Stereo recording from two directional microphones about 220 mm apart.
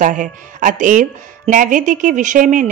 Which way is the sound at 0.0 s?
35° right (ahead or behind).